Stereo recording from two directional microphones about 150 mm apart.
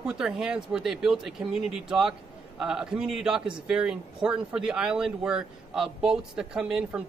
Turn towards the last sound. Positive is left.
turn(degrees=-5)  # may be behind; listen again after turning